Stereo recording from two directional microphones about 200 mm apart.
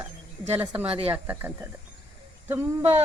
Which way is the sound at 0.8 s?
30° right (ahead or behind).